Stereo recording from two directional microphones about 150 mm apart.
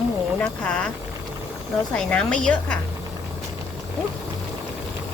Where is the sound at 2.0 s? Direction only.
5° left (ahead or behind).